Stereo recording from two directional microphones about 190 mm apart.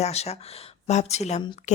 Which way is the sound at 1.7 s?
40° left (ahead or behind).